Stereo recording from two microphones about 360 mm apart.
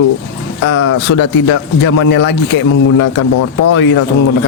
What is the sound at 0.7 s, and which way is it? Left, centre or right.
Speech, left.